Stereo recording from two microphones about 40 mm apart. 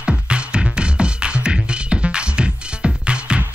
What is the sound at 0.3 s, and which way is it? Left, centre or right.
Music, right.